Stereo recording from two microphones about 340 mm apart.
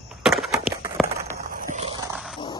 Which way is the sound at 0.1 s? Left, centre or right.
Centre.